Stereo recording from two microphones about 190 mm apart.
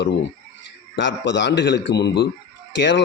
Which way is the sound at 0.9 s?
70° left (ahead or behind).